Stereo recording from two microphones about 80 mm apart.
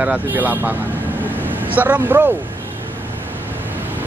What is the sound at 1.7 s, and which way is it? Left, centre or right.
Speech, right.